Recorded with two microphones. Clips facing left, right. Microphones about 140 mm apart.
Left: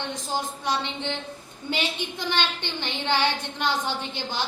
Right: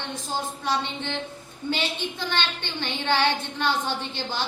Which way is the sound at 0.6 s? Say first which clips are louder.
Even; 15° left (ahead or behind).